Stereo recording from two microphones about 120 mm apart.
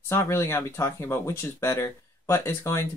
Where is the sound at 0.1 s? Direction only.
20° left (ahead or behind).